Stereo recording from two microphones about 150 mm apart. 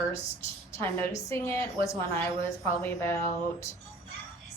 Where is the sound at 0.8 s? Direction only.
15° left (ahead or behind).